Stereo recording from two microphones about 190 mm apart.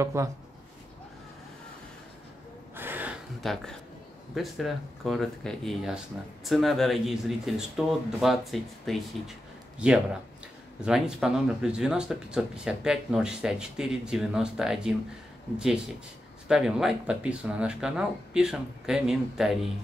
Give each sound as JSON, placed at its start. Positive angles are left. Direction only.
{"t": 0.0, "sound": "speech", "side_deg": -15}
{"t": 2.7, "sound": "a sound", "side_deg": -10}
{"t": 4.4, "sound": "speech", "side_deg": 0}
{"t": 10.8, "sound": "speech", "side_deg": -5}